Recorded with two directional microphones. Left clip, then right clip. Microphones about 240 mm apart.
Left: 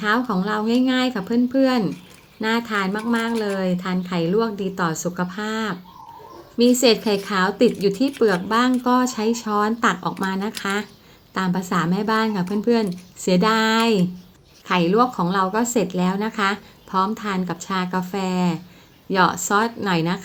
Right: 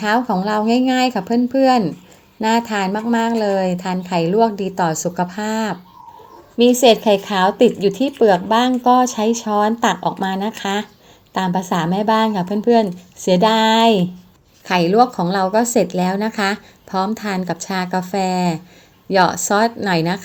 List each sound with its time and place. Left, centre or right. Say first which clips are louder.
0.0 s a woman's voice: right 4 dB; centre
6.7 s a woman's voice: right 6 dB; centre